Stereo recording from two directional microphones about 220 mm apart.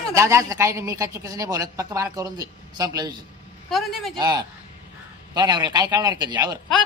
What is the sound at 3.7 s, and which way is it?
Speech, centre (ahead or behind).